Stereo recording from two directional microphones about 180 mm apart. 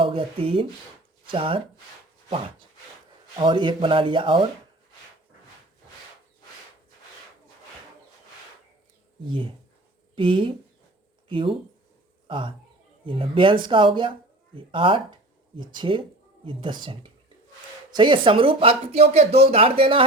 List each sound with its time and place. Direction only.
0.0 s speech: 30° right (ahead or behind)
3.3 s speech: 25° right (ahead or behind)
10.2 s speech: 30° right (ahead or behind)